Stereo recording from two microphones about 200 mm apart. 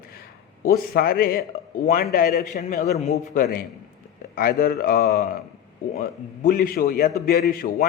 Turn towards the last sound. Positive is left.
turn(degrees=45)  # may be behind; listen again after turning